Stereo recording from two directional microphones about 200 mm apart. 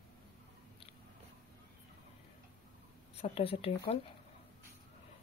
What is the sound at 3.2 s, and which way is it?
Speech, 30° left (ahead or behind).